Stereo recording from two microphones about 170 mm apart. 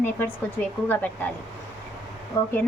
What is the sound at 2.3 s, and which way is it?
Speech, 15° left (ahead or behind).